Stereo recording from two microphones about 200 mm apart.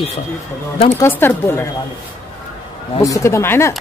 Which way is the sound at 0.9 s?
10° left (ahead or behind).